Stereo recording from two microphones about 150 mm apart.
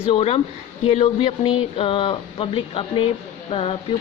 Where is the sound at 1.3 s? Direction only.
35° left (ahead or behind).